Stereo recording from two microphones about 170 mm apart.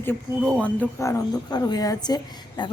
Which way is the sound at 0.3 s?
5° left (ahead or behind).